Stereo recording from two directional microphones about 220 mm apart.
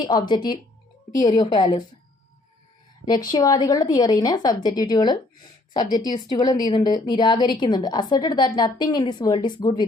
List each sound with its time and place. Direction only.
0.0 s a woman's voice: 20° left (ahead or behind)
3.2 s a woman's voice: 15° left (ahead or behind)